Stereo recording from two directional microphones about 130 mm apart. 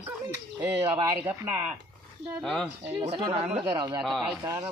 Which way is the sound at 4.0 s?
Centre (ahead or behind).